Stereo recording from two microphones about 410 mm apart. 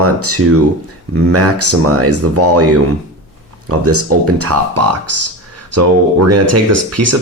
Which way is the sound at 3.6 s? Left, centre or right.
Right.